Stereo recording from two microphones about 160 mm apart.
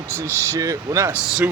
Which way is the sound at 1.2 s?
5° right (ahead or behind).